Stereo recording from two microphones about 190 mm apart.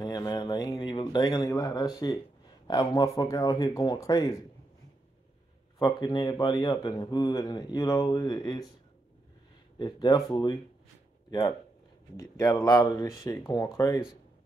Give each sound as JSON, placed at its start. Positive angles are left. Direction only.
{"t": 0.0, "sound": "a man's voice", "side_deg": 20}
{"t": 5.8, "sound": "a man's voice", "side_deg": 20}
{"t": 9.8, "sound": "a man's voice", "side_deg": 20}